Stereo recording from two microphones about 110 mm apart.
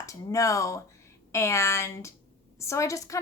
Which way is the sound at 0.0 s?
30° left (ahead or behind).